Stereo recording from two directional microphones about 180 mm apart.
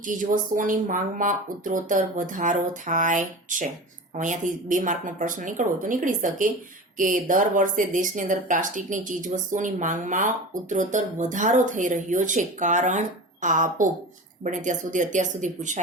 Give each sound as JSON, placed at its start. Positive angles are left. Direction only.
{"t": 0.0, "sound": "speech", "side_deg": -45}